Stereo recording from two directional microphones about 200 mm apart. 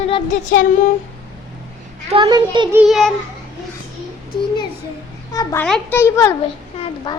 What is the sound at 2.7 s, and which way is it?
Speech, centre (ahead or behind).